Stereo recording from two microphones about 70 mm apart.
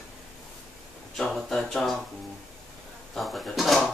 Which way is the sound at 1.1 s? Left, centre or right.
Centre.